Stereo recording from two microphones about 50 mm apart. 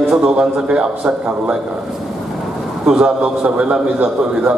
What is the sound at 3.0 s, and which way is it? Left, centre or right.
A man's voice, right.